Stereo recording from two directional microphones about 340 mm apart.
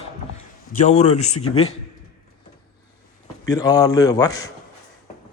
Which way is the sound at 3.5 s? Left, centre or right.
Centre.